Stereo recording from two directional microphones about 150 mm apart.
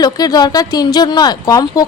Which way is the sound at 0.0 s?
25° left (ahead or behind).